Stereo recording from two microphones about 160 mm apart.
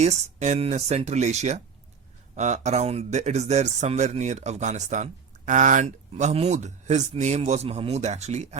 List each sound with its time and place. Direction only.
0.0 s speech: 45° right (ahead or behind)